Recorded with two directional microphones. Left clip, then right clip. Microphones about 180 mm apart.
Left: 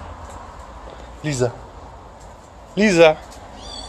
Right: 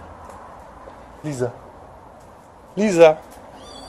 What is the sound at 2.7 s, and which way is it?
Speech, 5° right (ahead or behind).